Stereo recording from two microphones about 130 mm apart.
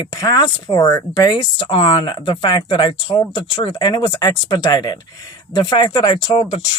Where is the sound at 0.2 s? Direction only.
25° left (ahead or behind).